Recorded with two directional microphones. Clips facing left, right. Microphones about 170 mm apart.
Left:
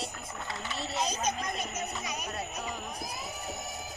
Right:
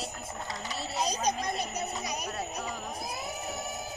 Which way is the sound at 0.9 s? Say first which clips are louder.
Right 2 dB; 35° right (ahead or behind).